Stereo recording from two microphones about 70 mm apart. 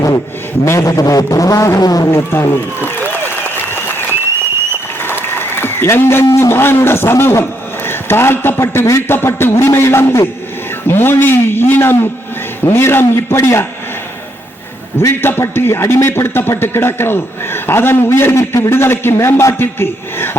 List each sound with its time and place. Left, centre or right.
0.6 s speech: left
1.8 s speech: left
2.0 s applause: left
5.3 s applause: left
6.2 s speech: left
6.5 s a man's voice: left
14.9 s a man's voice: left